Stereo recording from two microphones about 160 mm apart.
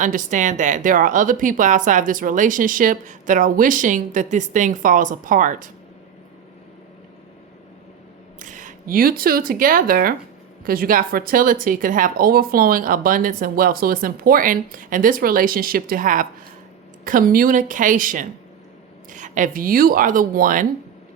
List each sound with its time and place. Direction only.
0.0 s a woman's voice: 55° right (ahead or behind)
8.4 s speech: 55° right (ahead or behind)